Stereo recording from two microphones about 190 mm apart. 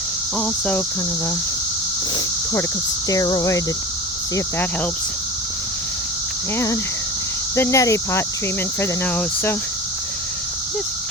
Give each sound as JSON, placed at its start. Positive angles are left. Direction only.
{"t": 0.3, "sound": "speech", "side_deg": 5}
{"t": 2.1, "sound": "cricket", "side_deg": 20}
{"t": 3.1, "sound": "speech", "side_deg": 20}
{"t": 7.5, "sound": "speech", "side_deg": 15}